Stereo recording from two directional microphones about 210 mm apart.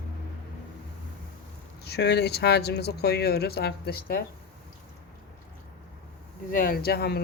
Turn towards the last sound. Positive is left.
turn(degrees=50)  # may be behind; listen again after turning